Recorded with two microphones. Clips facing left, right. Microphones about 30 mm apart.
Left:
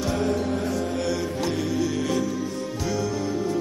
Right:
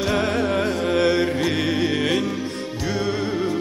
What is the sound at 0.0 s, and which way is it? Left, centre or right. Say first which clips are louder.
Music: right 4 dB; right.